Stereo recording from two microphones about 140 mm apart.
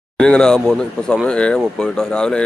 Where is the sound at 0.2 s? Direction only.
5° left (ahead or behind).